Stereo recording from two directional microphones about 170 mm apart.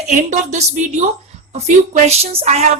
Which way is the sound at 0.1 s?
45° right (ahead or behind).